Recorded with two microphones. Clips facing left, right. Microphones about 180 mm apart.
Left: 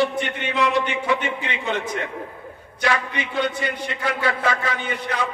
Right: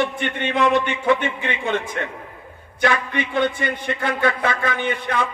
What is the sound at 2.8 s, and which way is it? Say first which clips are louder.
A man's voice: right 3 dB; 55° right (ahead or behind).